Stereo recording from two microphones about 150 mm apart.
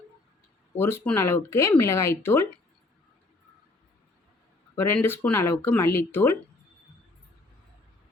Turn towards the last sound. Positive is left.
turn(degrees=15)  # may be behind; listen again after turning